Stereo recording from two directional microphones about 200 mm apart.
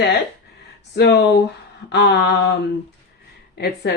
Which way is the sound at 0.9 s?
55° left (ahead or behind).